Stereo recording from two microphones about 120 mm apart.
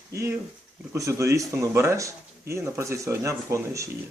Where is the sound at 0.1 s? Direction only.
25° right (ahead or behind).